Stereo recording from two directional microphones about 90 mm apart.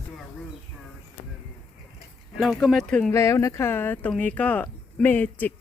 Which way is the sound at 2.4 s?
Centre (ahead or behind).